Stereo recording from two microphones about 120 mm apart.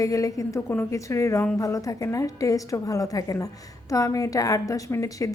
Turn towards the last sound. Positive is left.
turn(degrees=25)  # may be behind; listen again after turning